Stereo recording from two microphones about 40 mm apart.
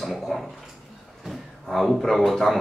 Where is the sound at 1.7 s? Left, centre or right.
Centre.